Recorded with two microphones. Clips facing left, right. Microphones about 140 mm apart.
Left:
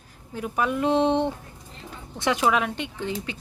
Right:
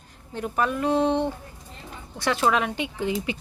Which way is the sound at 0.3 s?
5° left (ahead or behind).